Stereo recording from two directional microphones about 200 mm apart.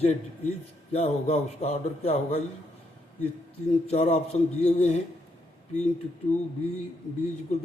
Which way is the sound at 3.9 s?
30° left (ahead or behind).